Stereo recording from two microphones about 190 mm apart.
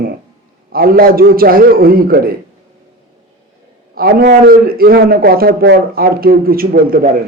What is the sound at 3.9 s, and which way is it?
Speech, 55° right (ahead or behind).